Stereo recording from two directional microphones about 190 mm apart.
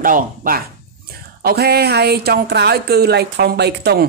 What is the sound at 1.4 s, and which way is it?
Speech, 55° right (ahead or behind).